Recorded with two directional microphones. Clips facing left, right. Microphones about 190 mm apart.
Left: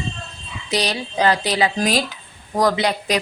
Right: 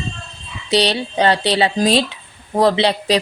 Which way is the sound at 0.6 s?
30° right (ahead or behind).